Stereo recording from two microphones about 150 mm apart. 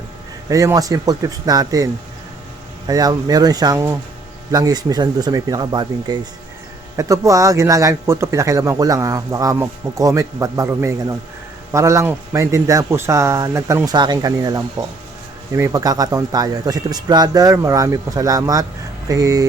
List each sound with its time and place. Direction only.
0.4 s a man's voice: 20° right (ahead or behind)